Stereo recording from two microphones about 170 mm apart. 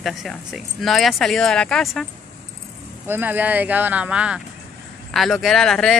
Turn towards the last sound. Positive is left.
turn(degrees=5)  # may be behind; listen again after turning